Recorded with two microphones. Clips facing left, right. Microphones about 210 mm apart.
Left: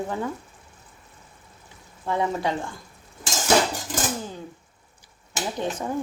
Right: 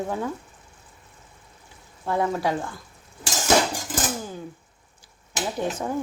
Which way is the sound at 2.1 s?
5° right (ahead or behind).